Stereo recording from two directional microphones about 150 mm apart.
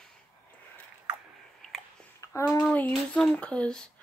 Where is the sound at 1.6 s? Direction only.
5° left (ahead or behind).